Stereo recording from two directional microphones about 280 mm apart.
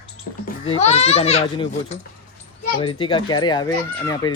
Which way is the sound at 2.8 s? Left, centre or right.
Centre.